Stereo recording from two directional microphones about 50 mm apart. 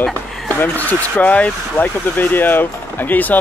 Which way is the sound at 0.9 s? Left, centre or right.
Left.